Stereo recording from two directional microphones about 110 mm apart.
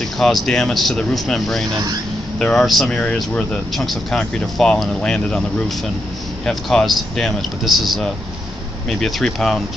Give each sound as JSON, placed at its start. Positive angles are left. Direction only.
{"t": 0.0, "sound": "speech", "side_deg": 5}
{"t": 6.4, "sound": "speech", "side_deg": 5}